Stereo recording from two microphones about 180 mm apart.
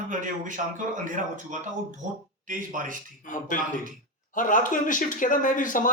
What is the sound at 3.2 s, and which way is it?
Speech, 45° left (ahead or behind).